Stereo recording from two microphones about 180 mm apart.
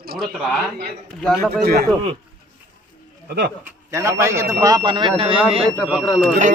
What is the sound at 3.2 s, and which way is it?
Speech, 60° right (ahead or behind).